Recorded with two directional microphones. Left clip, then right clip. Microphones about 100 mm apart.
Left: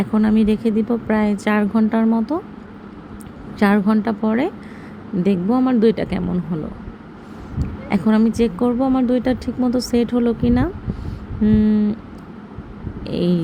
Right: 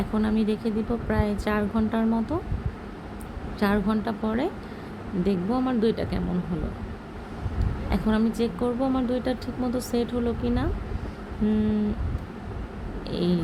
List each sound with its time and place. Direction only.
0.1 s speech: 50° left (ahead or behind)
3.6 s speech: 65° left (ahead or behind)
7.9 s speech: 55° left (ahead or behind)
11.4 s a sound: 45° left (ahead or behind)
13.1 s speech: 60° left (ahead or behind)